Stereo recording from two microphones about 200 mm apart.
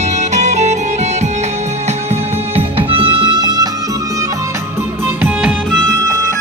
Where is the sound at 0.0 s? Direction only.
35° right (ahead or behind).